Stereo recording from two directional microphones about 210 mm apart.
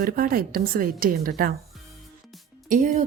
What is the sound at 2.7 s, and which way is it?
Speech, 35° right (ahead or behind).